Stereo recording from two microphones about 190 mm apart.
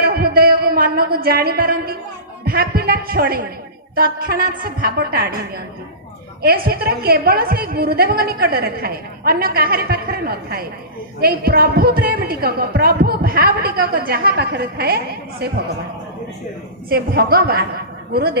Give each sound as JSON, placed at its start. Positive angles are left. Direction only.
{"t": 0.0, "sound": "a sound", "side_deg": -55}
{"t": 2.4, "sound": "a woman's voice", "side_deg": -50}
{"t": 6.4, "sound": "a woman's voice", "side_deg": -55}
{"t": 16.9, "sound": "a man's voice", "side_deg": -55}